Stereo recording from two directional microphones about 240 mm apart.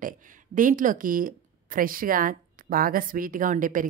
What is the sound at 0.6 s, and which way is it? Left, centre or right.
A woman's voice, right.